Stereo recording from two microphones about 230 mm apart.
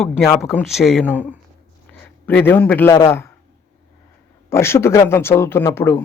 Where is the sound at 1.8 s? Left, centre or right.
Centre.